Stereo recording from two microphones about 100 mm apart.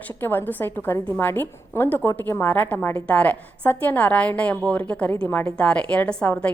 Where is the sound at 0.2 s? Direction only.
20° left (ahead or behind).